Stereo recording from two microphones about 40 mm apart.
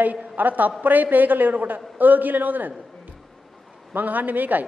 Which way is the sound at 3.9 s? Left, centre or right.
Right.